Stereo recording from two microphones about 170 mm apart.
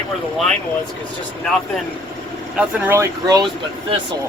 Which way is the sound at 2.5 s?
10° right (ahead or behind).